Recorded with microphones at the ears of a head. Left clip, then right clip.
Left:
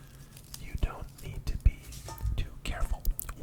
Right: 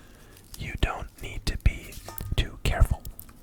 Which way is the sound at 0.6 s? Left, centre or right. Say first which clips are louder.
Right 12 dB; right.